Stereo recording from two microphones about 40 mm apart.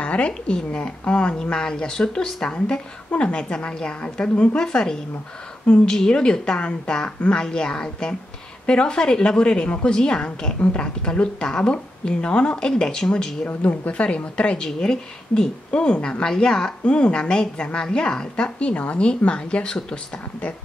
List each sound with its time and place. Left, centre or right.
0.0 s a sound: left
0.3 s a woman's voice: centre
0.7 s a woman's voice: left
3.1 s a woman's voice: left
13.7 s a woman's voice: left